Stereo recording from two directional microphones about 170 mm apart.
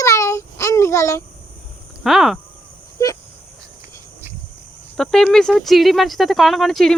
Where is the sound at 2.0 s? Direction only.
Centre (ahead or behind).